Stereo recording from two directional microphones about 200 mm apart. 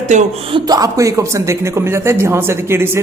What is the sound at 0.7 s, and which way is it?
Speech, 15° right (ahead or behind).